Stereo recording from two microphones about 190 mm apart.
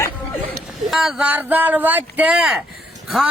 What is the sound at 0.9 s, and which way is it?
Speech, 5° right (ahead or behind).